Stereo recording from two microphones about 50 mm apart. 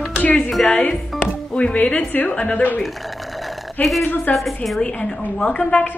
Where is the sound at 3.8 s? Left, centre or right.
Left.